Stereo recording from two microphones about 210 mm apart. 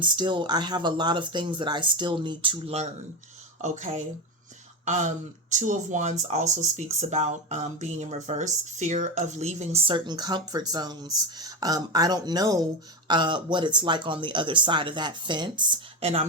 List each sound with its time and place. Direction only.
0.0 s speech: 20° right (ahead or behind)